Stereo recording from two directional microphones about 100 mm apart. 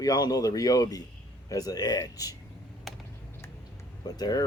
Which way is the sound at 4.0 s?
40° left (ahead or behind).